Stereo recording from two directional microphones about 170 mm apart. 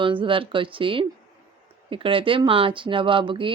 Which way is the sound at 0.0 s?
30° right (ahead or behind).